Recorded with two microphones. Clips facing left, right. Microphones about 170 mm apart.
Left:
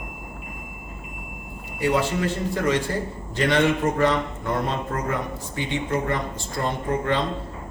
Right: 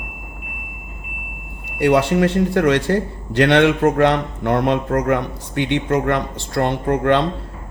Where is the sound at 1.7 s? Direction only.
70° right (ahead or behind).